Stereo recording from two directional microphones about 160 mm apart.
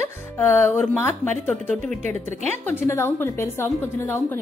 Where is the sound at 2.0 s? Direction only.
50° right (ahead or behind).